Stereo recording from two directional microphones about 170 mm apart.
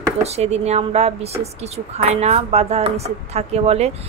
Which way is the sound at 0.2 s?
40° right (ahead or behind).